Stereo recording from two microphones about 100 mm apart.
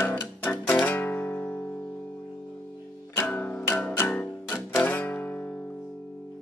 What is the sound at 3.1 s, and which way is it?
Music, 20° left (ahead or behind).